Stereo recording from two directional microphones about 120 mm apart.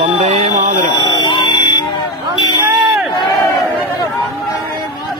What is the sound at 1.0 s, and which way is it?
Buzzer, 35° left (ahead or behind).